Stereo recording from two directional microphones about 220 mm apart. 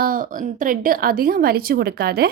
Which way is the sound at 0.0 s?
40° right (ahead or behind).